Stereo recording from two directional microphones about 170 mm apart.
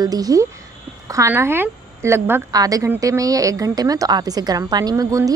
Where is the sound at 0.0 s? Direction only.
20° right (ahead or behind).